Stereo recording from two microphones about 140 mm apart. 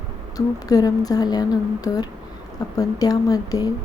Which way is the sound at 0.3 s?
25° left (ahead or behind).